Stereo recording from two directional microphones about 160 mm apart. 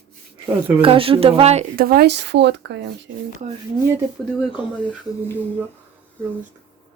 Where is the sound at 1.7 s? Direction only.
70° right (ahead or behind); by 2.8 s 90° right.